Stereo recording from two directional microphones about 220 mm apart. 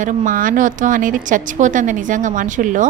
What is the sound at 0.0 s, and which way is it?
A woman's voice, 35° right (ahead or behind).